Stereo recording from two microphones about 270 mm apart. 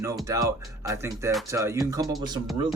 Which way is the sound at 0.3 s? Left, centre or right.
Centre.